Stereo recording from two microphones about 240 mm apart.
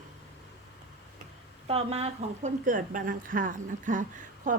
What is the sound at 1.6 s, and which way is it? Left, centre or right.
A woman's voice, right.